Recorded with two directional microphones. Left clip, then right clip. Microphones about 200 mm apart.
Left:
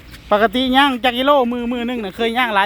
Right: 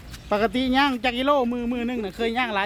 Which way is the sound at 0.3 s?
25° left (ahead or behind).